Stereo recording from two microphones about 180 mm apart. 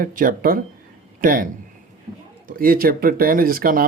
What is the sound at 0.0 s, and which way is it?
Speech, 50° right (ahead or behind).